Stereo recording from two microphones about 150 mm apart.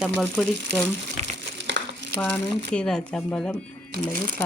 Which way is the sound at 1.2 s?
50° right (ahead or behind).